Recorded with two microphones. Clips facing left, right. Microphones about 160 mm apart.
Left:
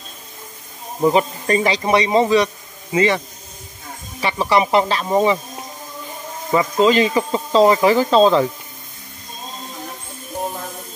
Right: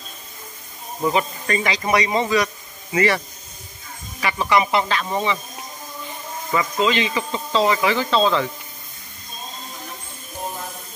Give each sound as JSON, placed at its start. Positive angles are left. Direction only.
{"t": 1.0, "sound": "a man's voice", "side_deg": 35}
{"t": 4.2, "sound": "speech", "side_deg": 30}
{"t": 6.5, "sound": "speech", "side_deg": 35}